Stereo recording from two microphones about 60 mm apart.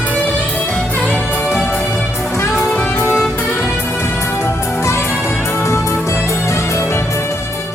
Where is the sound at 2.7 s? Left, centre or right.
Left.